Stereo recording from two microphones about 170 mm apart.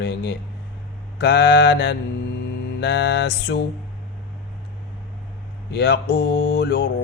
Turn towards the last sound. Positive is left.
turn(degrees=80)